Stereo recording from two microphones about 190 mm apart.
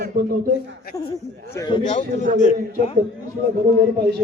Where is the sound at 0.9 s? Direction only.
15° left (ahead or behind).